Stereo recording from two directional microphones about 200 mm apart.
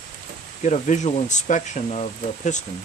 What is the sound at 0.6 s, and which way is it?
Speech, 35° left (ahead or behind).